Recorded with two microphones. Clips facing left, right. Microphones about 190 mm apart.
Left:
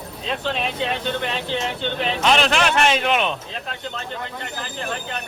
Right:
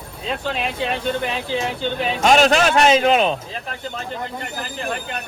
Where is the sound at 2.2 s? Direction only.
45° right (ahead or behind).